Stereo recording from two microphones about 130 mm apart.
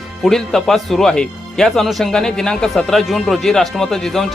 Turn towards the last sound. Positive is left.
turn(degrees=5)  # may be behind; listen again after turning